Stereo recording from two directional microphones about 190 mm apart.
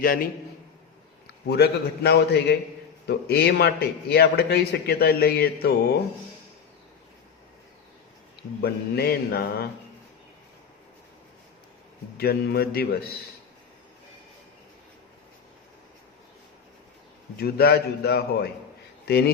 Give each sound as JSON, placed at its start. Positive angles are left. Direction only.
{"t": 0.0, "sound": "a man's voice", "side_deg": 50}
{"t": 1.5, "sound": "a man's voice", "side_deg": 60}
{"t": 8.6, "sound": "a man's voice", "side_deg": 55}
{"t": 12.1, "sound": "a man's voice", "side_deg": 55}
{"t": 17.3, "sound": "a man's voice", "side_deg": 55}